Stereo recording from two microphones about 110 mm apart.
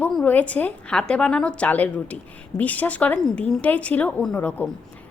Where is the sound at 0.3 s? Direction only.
15° left (ahead or behind).